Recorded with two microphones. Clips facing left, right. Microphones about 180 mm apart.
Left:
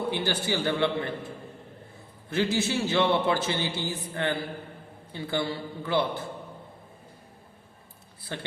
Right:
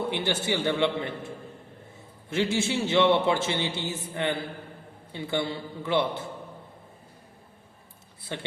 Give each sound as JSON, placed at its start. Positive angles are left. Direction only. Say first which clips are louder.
{"t": 0.3, "sound": "a man's voice", "louder": "right 1 dB", "side_deg": -25}
{"t": 2.3, "sound": "a man's voice", "louder": "even", "side_deg": -25}
{"t": 8.3, "sound": "a man's voice", "louder": "right 1 dB", "side_deg": -20}